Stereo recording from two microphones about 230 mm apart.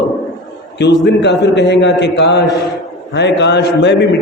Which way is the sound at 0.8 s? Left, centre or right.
Left.